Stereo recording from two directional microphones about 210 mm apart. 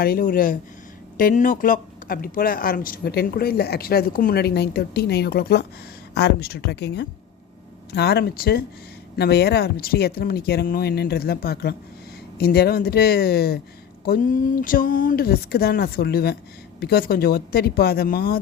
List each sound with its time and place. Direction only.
0.0 s speech: 45° left (ahead or behind)